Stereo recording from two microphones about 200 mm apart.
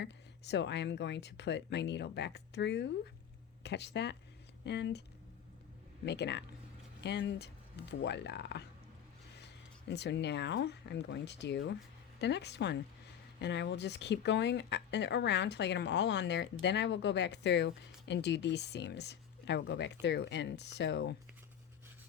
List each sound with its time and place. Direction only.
0.0 s speech: 60° left (ahead or behind)
6.1 s speech: 55° left (ahead or behind)
9.9 s speech: 60° left (ahead or behind)